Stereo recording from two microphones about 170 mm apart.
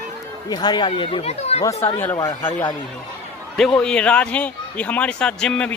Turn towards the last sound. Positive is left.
turn(degrees=5)  # may be behind; listen again after turning